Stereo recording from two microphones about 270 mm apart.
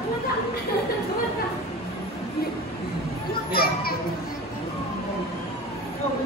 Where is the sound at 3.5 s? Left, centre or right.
Left.